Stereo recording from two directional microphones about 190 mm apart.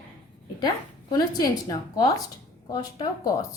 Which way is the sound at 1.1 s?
20° left (ahead or behind).